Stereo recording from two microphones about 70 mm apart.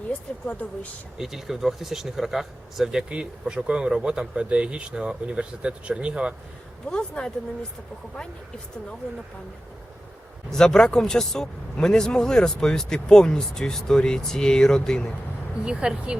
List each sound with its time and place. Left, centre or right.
0.4 s a woman's voice: left
1.2 s speech: centre
6.8 s speech: centre
10.5 s speech: centre
15.6 s speech: centre